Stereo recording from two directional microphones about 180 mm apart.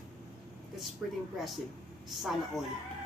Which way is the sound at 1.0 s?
Centre (ahead or behind).